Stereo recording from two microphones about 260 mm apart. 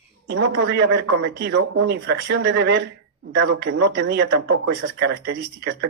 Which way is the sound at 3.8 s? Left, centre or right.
Right.